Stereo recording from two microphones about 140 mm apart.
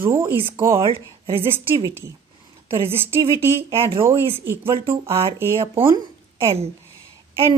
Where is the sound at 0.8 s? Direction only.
40° right (ahead or behind).